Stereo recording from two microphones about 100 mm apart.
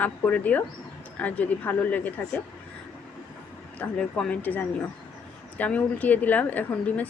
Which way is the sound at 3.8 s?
10° left (ahead or behind).